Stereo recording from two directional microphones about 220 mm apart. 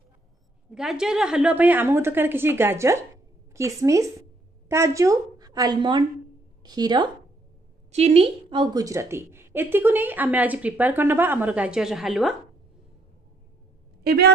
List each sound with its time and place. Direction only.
0.7 s a woman's voice: centre (ahead or behind); by 7.1 s 20° right (ahead or behind)
7.9 s a woman's voice: 30° right (ahead or behind); by 12.4 s centre (ahead or behind)
14.0 s a woman's voice: 45° right (ahead or behind)